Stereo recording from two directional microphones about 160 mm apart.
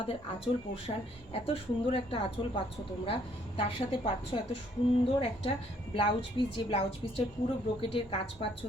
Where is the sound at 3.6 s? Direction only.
35° left (ahead or behind).